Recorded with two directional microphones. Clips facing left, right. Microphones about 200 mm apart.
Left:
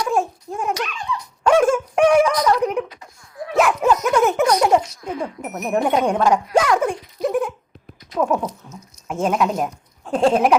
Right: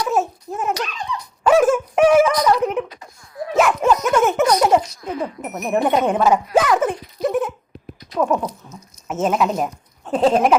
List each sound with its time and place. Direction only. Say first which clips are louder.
0.0 s babbling: right 1 dB; 5° right (ahead or behind)
0.7 s dog: right 1 dB; 35° right (ahead or behind)
1.5 s a sound: right 1 dB; 5° right (ahead or behind)
2.9 s laughter: right 3 dB; 35° right (ahead or behind)
3.6 s baby laughter: even; centre (ahead or behind)
5.0 s a sound: right 1 dB; 5° right (ahead or behind)
9.0 s speech: right 1 dB; 5° right (ahead or behind)